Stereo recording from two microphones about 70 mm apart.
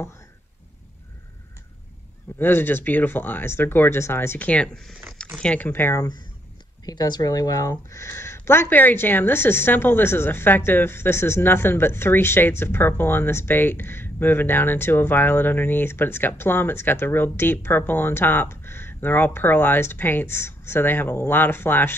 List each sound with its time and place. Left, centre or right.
2.3 s a woman's voice: left
4.5 s speech: centre
4.7 s speech: centre
5.4 s speech: centre
5.7 s a woman's voice: left
6.8 s speech: left
7.9 s a woman's voice: left